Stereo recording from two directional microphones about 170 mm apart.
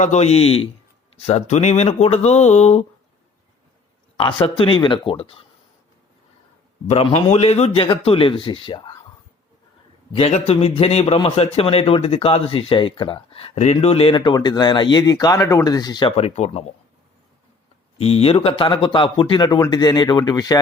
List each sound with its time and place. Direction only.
0.0 s a man's voice: 40° left (ahead or behind)
4.2 s a man's voice: 30° left (ahead or behind)
6.8 s a man's voice: 40° left (ahead or behind)
10.1 s a man's voice: 40° left (ahead or behind)
18.0 s a man's voice: 35° left (ahead or behind)